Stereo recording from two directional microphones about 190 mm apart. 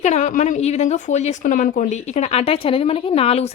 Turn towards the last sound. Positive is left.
turn(degrees=30)  # may be behind; listen again after turning